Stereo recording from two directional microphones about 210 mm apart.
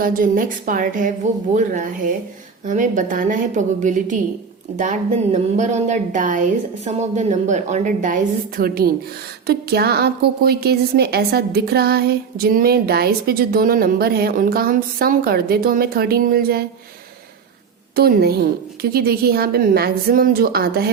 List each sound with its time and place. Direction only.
0.0 s a woman's voice: 40° right (ahead or behind)
17.9 s a woman's voice: 45° right (ahead or behind)